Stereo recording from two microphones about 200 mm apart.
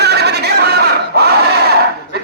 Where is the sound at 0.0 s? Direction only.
55° right (ahead or behind).